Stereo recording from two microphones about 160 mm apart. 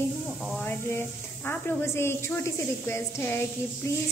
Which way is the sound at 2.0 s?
15° left (ahead or behind).